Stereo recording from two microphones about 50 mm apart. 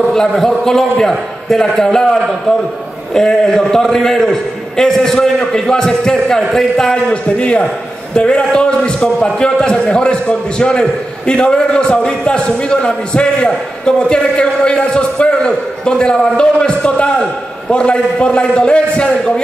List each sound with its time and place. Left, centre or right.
0.1 s a man's voice: centre
3.2 s a man's voice: centre
7.1 s a man's voice: left